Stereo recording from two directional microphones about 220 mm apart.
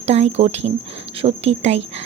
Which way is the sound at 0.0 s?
30° right (ahead or behind).